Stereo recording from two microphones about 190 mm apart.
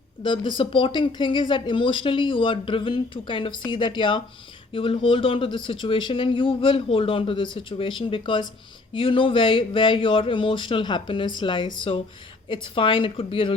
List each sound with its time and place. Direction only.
0.2 s speech: 25° left (ahead or behind)